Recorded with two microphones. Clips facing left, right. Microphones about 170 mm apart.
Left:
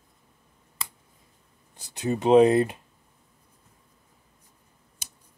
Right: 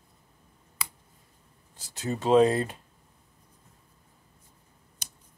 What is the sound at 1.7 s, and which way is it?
Speech, 15° left (ahead or behind).